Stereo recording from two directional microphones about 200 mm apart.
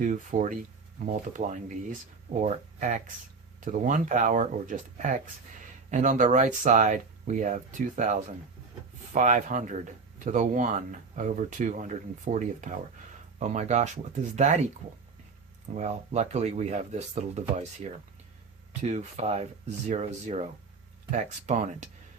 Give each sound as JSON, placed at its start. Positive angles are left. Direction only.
{"t": 0.0, "sound": "speech", "side_deg": -40}
{"t": 15.7, "sound": "speech", "side_deg": -35}